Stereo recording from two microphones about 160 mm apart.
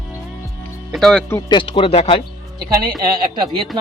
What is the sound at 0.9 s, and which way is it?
Speech, 5° left (ahead or behind).